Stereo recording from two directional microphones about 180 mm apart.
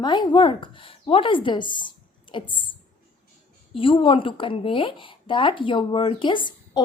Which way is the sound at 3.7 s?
30° left (ahead or behind).